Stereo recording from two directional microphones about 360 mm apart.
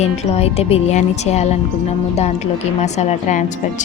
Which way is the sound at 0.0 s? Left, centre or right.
Centre.